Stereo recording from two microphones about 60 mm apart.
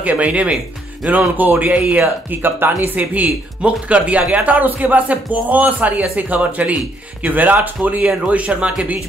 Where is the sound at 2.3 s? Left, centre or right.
Right.